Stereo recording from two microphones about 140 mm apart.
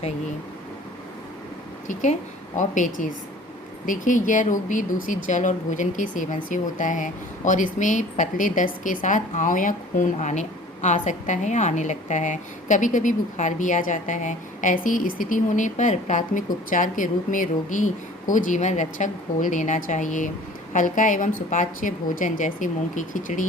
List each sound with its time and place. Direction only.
1.9 s speech: 60° left (ahead or behind)